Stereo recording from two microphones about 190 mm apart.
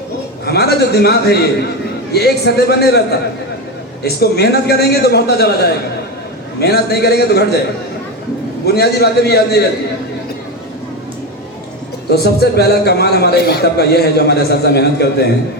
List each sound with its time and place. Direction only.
0.4 s a man's voice: 55° left (ahead or behind)
8.6 s a man's voice: 55° left (ahead or behind)
12.0 s a man's voice: 55° left (ahead or behind)